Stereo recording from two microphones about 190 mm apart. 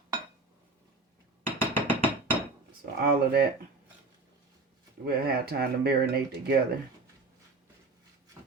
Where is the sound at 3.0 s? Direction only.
55° right (ahead or behind).